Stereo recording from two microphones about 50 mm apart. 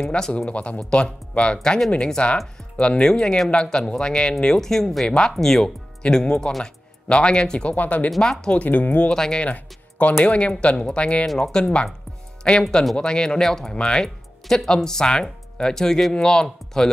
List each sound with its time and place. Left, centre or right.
0.0 s speech: centre
0.5 s speech: left
7.7 s speech: left
8.2 s speech: centre
8.6 s speech: left
9.1 s speech: centre
9.5 s music: left
10.2 s speech: left
11.2 s speech: centre